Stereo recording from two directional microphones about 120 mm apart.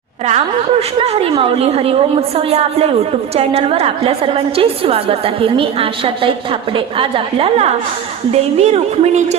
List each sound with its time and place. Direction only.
0.3 s a woman's voice: 65° right (ahead or behind)